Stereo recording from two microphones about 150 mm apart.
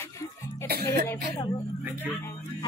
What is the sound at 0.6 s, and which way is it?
Speech, 90° right.